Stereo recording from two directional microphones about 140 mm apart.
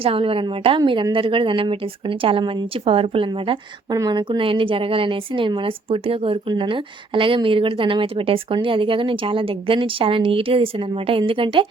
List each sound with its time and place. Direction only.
0.0 s speech: 40° right (ahead or behind)
3.9 s speech: 30° right (ahead or behind)